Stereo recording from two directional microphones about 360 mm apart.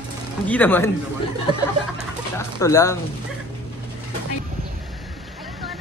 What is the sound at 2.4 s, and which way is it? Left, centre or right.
Speech, centre.